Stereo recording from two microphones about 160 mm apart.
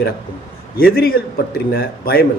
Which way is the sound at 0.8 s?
70° left (ahead or behind).